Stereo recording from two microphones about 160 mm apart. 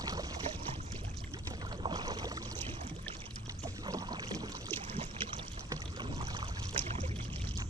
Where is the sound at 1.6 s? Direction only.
30° right (ahead or behind).